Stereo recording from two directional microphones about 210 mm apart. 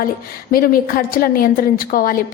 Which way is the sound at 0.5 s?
45° left (ahead or behind).